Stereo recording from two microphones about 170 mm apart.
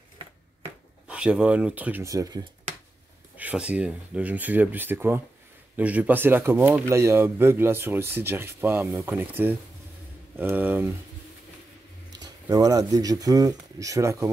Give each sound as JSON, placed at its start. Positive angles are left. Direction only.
{"t": 1.0, "sound": "speech", "side_deg": -5}
{"t": 3.3, "sound": "speech", "side_deg": -10}
{"t": 12.2, "sound": "speech", "side_deg": -20}